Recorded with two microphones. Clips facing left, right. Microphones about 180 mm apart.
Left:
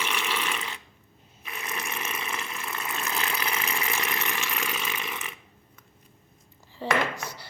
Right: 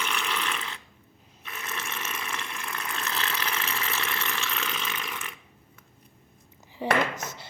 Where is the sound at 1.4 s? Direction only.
10° left (ahead or behind).